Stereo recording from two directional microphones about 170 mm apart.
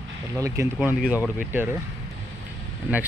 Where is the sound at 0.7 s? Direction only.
5° right (ahead or behind).